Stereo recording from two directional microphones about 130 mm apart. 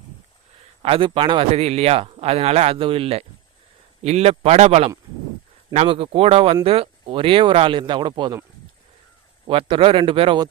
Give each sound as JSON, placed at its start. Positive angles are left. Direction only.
{"t": 0.8, "sound": "a man's voice", "side_deg": -45}
{"t": 5.9, "sound": "a man's voice", "side_deg": -45}
{"t": 9.5, "sound": "a man's voice", "side_deg": -45}